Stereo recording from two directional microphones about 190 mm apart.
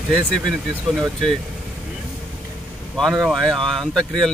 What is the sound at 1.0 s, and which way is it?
Speech, centre (ahead or behind).